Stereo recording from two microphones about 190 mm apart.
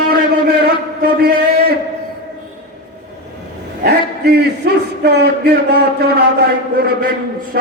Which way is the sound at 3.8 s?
60° right (ahead or behind).